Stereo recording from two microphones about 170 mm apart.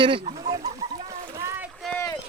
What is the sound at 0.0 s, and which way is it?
Speech, 30° right (ahead or behind).